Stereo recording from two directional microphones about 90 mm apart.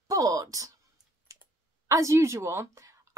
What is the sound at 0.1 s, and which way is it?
Speech, 40° right (ahead or behind).